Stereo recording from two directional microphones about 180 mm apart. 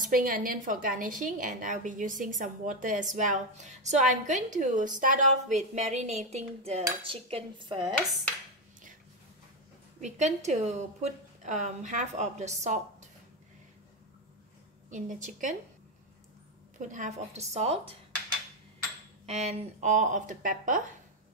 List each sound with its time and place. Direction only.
0.0 s a woman's voice: 50° right (ahead or behind); by 7.9 s 25° right (ahead or behind)
9.9 s a woman's voice: 40° right (ahead or behind)
14.9 s a woman's voice: 45° right (ahead or behind)
16.8 s a woman's voice: 45° right (ahead or behind)
19.2 s a woman's voice: 35° right (ahead or behind)